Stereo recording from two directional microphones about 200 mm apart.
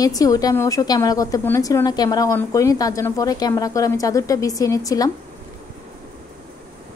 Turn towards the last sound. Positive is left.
turn(degrees=15)  # may be behind; listen again after turning